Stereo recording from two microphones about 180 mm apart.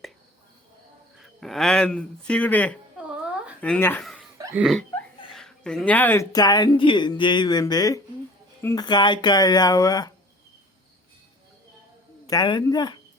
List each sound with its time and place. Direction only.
1.2 s speech: centre (ahead or behind)
4.0 s hiccup: centre (ahead or behind)
4.5 s speech: centre (ahead or behind)
5.3 s a sound: 5° left (ahead or behind)
6.3 s speech: 20° left (ahead or behind)
12.3 s speech: 25° left (ahead or behind)